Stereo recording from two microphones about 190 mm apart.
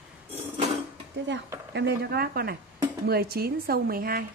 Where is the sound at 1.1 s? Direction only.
70° right (ahead or behind).